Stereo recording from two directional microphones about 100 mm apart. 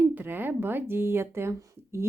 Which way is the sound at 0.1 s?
20° right (ahead or behind).